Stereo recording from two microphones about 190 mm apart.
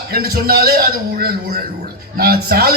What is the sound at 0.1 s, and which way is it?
A man's voice, 55° right (ahead or behind).